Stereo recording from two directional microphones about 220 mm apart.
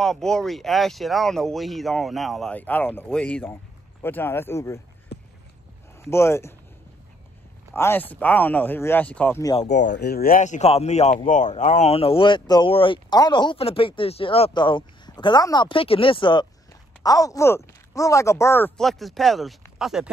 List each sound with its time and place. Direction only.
0.0 s speech: centre (ahead or behind)
5.9 s speech: 10° left (ahead or behind)
7.7 s speech: 10° left (ahead or behind)
9.7 s speech: 50° left (ahead or behind); by 20.1 s centre (ahead or behind)